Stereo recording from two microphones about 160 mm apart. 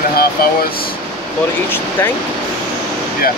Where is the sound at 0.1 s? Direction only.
70° left (ahead or behind).